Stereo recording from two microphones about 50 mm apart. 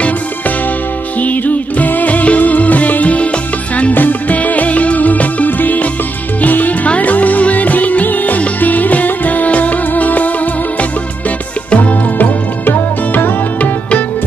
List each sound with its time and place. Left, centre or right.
1.2 s music: left